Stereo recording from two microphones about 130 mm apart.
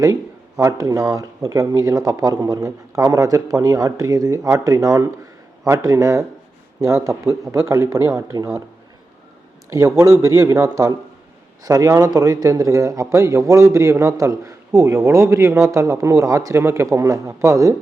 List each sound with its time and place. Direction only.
0.6 s a man's voice: 25° right (ahead or behind)
9.6 s a man's voice: 25° right (ahead or behind)